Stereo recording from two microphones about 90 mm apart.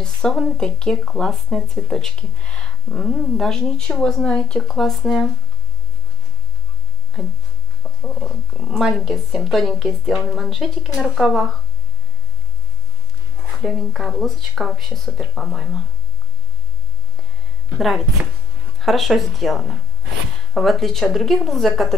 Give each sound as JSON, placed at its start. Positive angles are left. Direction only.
{"t": 0.0, "sound": "speech", "side_deg": 10}
{"t": 8.0, "sound": "a woman's voice", "side_deg": 0}
{"t": 13.6, "sound": "a woman's voice", "side_deg": 0}
{"t": 17.7, "sound": "a woman's voice", "side_deg": 0}